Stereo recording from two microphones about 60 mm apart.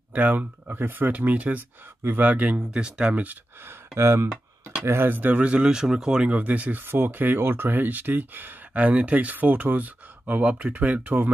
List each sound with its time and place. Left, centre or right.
0.1 s speech: right
3.6 s speech: right; by 6.3 s centre
6.3 s speech: right
6.8 s speech: right